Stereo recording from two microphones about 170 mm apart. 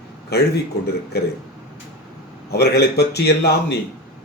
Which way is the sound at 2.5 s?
70° left (ahead or behind).